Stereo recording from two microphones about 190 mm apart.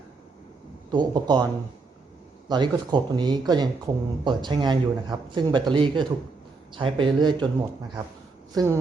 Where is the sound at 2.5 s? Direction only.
25° right (ahead or behind).